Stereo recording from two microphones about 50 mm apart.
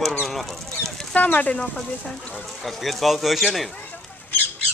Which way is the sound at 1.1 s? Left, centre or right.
Left.